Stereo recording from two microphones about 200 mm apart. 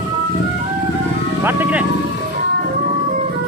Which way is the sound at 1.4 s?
10° right (ahead or behind).